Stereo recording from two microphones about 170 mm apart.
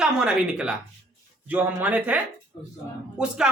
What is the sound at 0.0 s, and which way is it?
Speech, 5° right (ahead or behind).